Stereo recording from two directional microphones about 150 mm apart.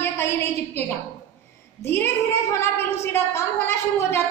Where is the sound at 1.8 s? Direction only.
15° left (ahead or behind).